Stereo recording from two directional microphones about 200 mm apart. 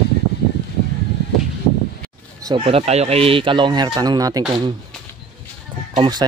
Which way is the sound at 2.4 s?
25° right (ahead or behind).